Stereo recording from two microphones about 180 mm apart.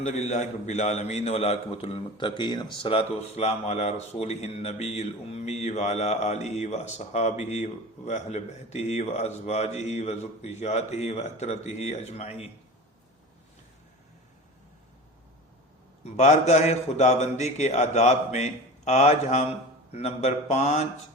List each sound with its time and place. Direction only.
0.0 s a man's voice: 40° left (ahead or behind)
16.0 s a man's voice: 40° left (ahead or behind)